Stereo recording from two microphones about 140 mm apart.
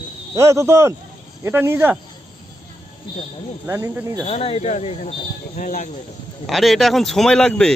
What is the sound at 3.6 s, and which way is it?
Speech, 15° right (ahead or behind).